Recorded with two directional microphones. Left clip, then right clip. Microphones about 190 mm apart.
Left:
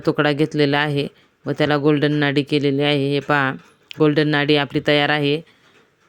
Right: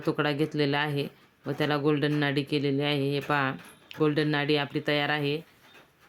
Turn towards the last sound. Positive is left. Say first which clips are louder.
# left 10 dB
turn(degrees=40)  # may be behind; listen again after turning